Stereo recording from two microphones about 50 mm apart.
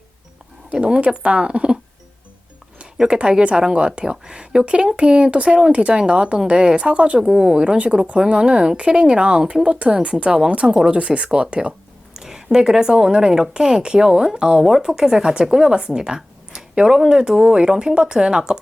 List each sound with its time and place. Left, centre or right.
0.7 s speech: centre
7.3 s a woman's voice: centre
9.6 s speech: right
12.1 s a woman's voice: centre